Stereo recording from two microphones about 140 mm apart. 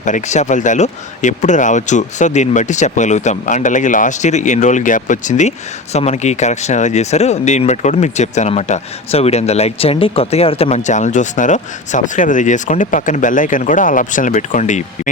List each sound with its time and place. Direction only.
0.0 s speech: 60° left (ahead or behind)